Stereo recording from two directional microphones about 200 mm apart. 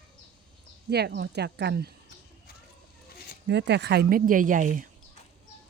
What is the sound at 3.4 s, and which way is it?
Speech, 55° right (ahead or behind).